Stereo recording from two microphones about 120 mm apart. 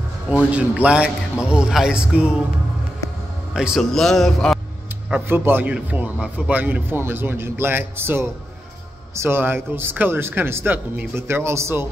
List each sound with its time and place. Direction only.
0.3 s a man's voice: 10° right (ahead or behind)
3.5 s a man's voice: 5° right (ahead or behind)
5.3 s a man's voice: 20° right (ahead or behind)